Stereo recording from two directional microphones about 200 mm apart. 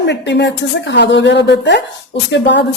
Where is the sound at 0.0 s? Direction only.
60° left (ahead or behind).